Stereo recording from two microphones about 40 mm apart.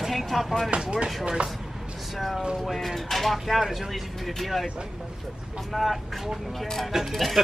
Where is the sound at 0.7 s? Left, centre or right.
Right.